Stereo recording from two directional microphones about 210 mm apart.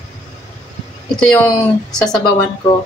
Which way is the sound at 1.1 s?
5° left (ahead or behind).